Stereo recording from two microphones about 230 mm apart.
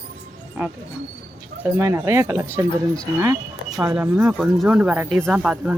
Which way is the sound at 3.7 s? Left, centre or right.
Centre.